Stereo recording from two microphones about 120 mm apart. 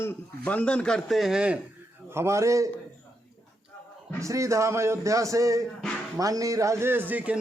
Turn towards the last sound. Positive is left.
turn(degrees=-10)  # may be behind; listen again after turning